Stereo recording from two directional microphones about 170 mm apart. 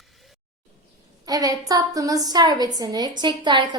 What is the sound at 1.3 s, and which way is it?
A woman's voice, 20° right (ahead or behind).